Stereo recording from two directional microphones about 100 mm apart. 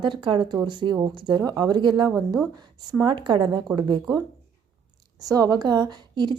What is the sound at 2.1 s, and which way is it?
Speech, 5° right (ahead or behind).